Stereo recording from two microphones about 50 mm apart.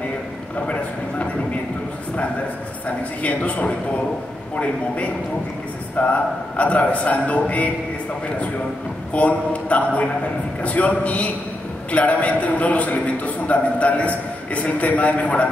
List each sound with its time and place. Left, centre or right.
0.6 s a man's voice: left
3.2 s a man's voice: left
9.1 s a man's voice: left